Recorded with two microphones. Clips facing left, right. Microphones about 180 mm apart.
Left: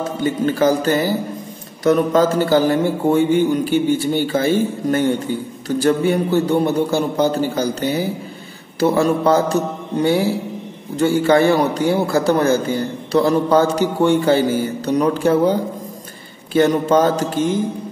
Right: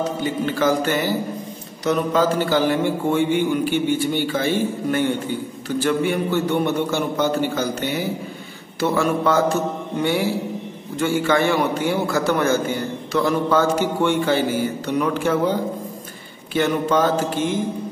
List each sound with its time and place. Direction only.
0.2 s a man's voice: 40° left (ahead or behind)
11.0 s a man's voice: 40° left (ahead or behind)
16.5 s a man's voice: 40° left (ahead or behind)